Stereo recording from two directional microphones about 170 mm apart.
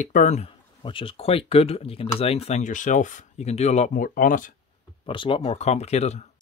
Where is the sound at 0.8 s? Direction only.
30° left (ahead or behind); by 4.6 s 50° left (ahead or behind).